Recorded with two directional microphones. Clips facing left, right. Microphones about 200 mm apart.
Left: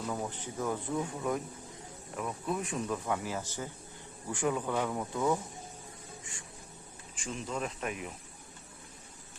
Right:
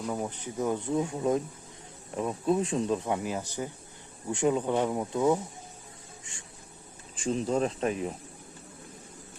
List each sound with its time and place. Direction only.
0.1 s speech: 15° right (ahead or behind)
7.2 s speech: 35° right (ahead or behind)